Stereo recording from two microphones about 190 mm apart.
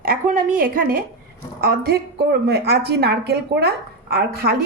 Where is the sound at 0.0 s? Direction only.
50° right (ahead or behind).